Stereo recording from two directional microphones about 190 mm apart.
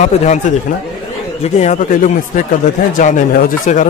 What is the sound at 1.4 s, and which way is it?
Speech, 35° left (ahead or behind).